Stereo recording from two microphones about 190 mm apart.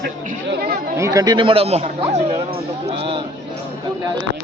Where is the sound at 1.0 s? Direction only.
20° right (ahead or behind); by 2.3 s 35° right (ahead or behind).